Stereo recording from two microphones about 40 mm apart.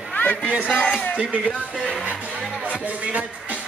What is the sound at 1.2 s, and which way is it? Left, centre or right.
Speech, right.